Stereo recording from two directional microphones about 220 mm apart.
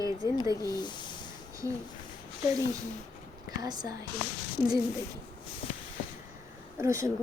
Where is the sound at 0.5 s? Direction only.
15° left (ahead or behind).